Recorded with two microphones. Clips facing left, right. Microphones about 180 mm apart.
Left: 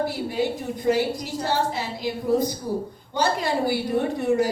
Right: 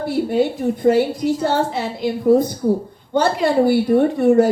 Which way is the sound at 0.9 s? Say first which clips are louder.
Right 7 dB; 55° right (ahead or behind).